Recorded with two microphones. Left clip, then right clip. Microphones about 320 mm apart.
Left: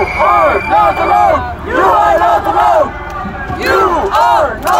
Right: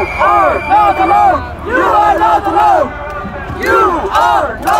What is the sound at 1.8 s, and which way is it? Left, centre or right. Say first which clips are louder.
Battle cry: left 1 dB; left.